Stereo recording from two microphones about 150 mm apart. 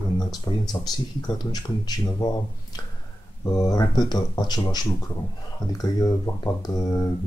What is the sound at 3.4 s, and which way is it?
Speech, 25° left (ahead or behind).